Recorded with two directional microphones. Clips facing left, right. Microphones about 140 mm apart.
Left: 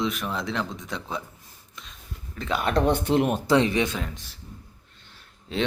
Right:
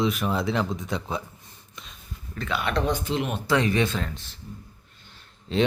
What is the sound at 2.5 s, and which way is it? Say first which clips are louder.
Speech: left 3 dB; 40° left (ahead or behind).